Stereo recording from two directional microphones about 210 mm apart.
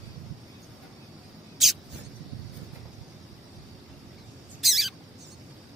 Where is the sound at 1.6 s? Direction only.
Centre (ahead or behind).